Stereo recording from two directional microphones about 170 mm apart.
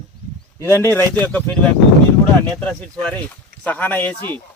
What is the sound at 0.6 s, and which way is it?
Speech, 15° left (ahead or behind).